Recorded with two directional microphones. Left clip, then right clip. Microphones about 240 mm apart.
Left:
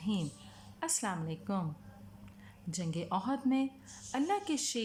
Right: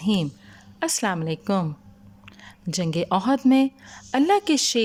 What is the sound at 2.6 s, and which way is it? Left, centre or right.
Speech, right.